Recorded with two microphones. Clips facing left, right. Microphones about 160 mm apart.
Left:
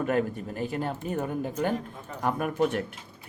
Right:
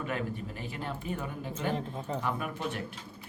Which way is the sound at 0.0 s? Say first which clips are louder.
Left 8 dB; 45° left (ahead or behind).